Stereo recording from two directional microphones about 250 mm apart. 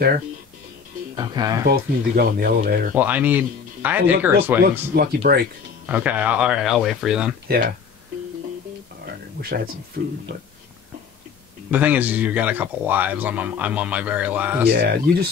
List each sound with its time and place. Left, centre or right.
1.1 s speech: centre
1.7 s speech: right
2.9 s speech: centre
4.9 s speech: right
5.9 s speech: centre
7.4 s speech: right
9.0 s a sound: right
11.7 s speech: centre
14.7 s speech: right